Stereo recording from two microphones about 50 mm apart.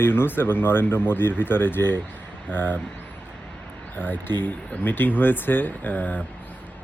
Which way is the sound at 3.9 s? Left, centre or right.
Left.